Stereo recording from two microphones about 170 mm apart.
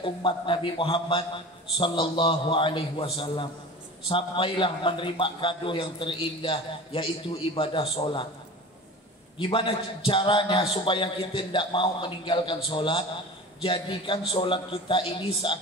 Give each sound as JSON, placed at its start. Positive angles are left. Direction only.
{"t": 0.0, "sound": "a man's voice", "side_deg": 30}
{"t": 9.4, "sound": "a man's voice", "side_deg": 30}